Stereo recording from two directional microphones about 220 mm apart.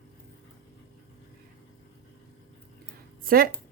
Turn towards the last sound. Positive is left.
turn(degrees=-40)  # may be behind; listen again after turning